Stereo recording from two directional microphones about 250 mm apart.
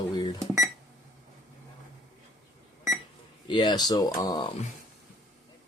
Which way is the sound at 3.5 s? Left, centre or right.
Centre.